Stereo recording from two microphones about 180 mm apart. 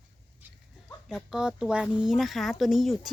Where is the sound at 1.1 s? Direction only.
Centre (ahead or behind).